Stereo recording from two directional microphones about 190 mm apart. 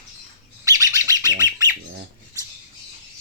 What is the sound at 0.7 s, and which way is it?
Bird, 15° right (ahead or behind).